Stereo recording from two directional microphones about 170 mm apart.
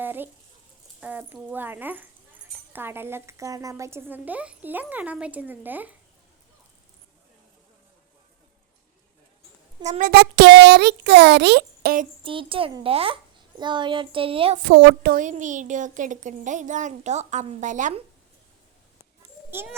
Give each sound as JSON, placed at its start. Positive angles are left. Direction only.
{"t": 0.0, "sound": "a woman's voice", "side_deg": -10}
{"t": 10.0, "sound": "a child's voice", "side_deg": -70}
{"t": 12.2, "sound": "a child's voice", "side_deg": -30}
{"t": 14.6, "sound": "a child's voice", "side_deg": -75}
{"t": 15.2, "sound": "speech", "side_deg": -45}
{"t": 19.5, "sound": "a child's voice", "side_deg": -15}